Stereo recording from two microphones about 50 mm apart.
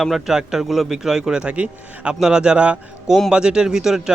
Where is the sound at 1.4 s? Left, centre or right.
Right.